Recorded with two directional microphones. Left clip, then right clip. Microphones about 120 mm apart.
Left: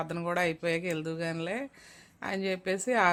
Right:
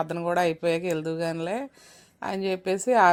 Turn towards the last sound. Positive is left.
turn(degrees=-30)  # may be behind; listen again after turning